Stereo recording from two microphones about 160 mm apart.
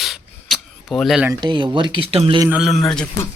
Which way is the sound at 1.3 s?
30° right (ahead or behind).